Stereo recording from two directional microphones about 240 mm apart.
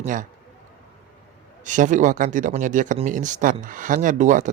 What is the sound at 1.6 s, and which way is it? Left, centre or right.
Speech, right.